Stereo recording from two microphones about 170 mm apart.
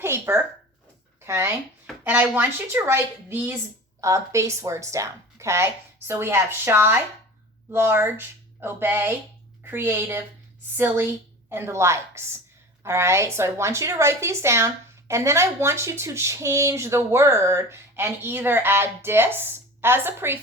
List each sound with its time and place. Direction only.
0.0 s a sound: 15° right (ahead or behind)
1.2 s a woman's voice: 15° right (ahead or behind)
11.4 s a woman's voice: 15° right (ahead or behind)